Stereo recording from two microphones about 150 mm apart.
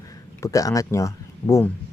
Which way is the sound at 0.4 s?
20° left (ahead or behind).